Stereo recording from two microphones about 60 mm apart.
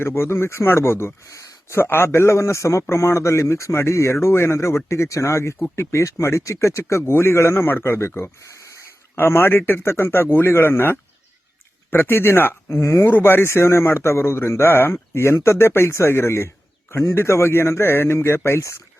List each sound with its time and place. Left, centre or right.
0.0 s a man's voice: left
1.3 s a sound: left
1.7 s a man's voice: left
7.0 s a man's voice: left
12.8 s speech: left
13.1 s a man's voice: left